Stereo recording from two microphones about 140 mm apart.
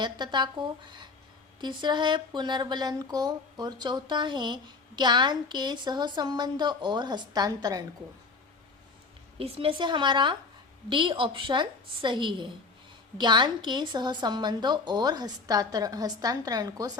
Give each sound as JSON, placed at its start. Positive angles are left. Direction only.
{"t": 0.0, "sound": "speech", "side_deg": -30}
{"t": 9.4, "sound": "a woman's voice", "side_deg": -40}